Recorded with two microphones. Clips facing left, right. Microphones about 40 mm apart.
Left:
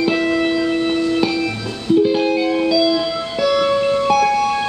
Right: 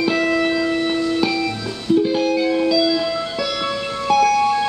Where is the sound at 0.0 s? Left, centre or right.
Centre.